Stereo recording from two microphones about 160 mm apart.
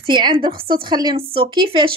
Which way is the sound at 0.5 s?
70° right (ahead or behind).